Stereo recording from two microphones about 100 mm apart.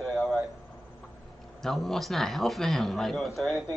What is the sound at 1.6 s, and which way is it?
A man's voice, centre (ahead or behind).